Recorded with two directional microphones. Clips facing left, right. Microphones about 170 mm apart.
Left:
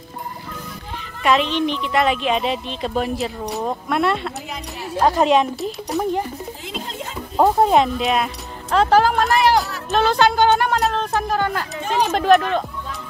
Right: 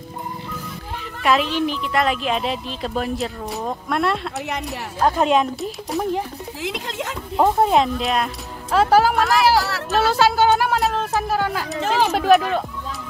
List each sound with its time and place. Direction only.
1.2 s a woman's voice: 5° right (ahead or behind)
6.6 s a sound: 90° right
7.3 s a woman's voice: centre (ahead or behind)